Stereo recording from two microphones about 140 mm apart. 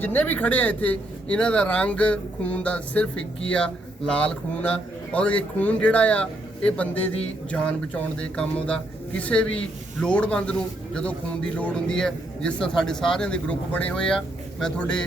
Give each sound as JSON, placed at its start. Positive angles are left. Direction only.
{"t": 0.0, "sound": "speech", "side_deg": 15}